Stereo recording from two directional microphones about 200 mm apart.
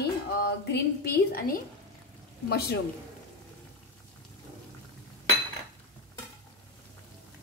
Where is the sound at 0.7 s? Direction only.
55° left (ahead or behind).